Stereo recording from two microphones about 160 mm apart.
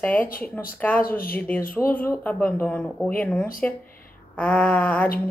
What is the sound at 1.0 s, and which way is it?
Speech, 65° left (ahead or behind).